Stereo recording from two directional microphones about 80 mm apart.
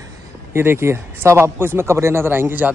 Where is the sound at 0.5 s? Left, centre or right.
Right.